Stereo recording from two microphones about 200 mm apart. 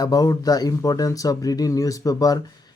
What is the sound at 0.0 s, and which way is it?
Speech, 20° left (ahead or behind).